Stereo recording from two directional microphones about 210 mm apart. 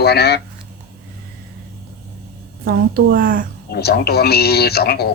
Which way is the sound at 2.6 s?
45° right (ahead or behind).